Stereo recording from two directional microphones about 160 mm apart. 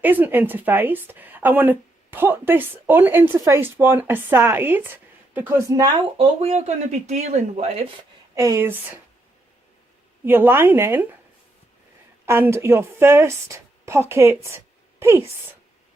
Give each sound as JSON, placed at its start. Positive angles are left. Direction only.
{"t": 0.0, "sound": "speech", "side_deg": -10}
{"t": 6.1, "sound": "speech", "side_deg": -40}
{"t": 8.4, "sound": "speech", "side_deg": -20}
{"t": 10.2, "sound": "speech", "side_deg": -10}
{"t": 12.2, "sound": "a woman's voice", "side_deg": -15}